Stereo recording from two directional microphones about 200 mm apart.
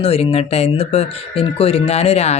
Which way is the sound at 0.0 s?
30° left (ahead or behind).